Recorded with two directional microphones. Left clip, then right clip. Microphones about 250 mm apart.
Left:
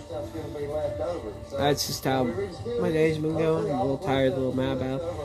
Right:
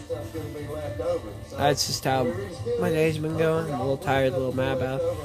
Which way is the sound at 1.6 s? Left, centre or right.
Centre.